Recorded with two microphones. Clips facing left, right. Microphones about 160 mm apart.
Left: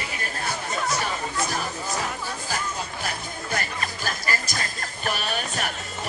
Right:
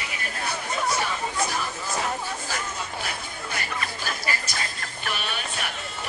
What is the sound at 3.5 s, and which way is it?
Music, 40° left (ahead or behind).